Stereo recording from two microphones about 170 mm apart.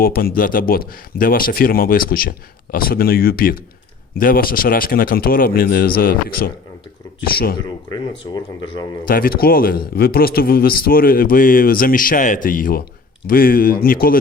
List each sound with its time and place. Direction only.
0.0 s speech: 60° left (ahead or behind)
7.9 s speech: 25° left (ahead or behind)
9.0 s speech: 60° left (ahead or behind)